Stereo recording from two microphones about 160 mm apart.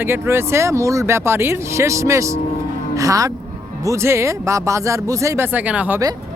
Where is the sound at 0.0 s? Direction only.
15° right (ahead or behind).